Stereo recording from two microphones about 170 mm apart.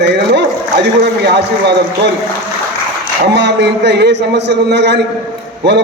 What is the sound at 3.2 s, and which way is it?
A man's voice, 90° right.